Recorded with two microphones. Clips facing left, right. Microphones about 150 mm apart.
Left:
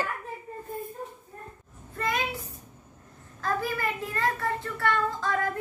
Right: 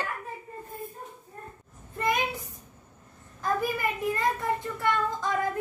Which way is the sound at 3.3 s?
20° right (ahead or behind).